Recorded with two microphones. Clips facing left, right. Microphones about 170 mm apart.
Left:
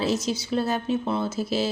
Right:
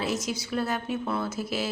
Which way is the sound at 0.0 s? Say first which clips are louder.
Left 4 dB; 30° left (ahead or behind).